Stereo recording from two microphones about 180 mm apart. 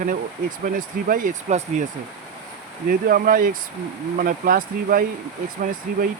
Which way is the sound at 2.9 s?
55° right (ahead or behind).